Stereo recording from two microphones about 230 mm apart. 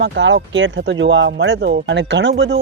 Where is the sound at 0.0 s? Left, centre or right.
Right.